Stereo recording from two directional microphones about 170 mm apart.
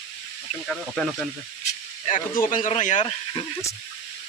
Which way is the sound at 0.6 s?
Centre (ahead or behind).